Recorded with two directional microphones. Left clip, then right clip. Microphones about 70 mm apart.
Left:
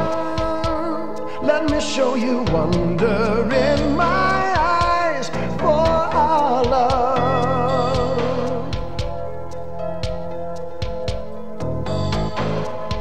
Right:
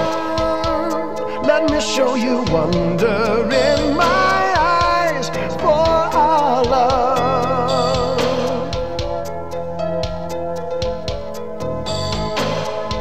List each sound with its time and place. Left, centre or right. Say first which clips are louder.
0.0 s music: right 3 dB; left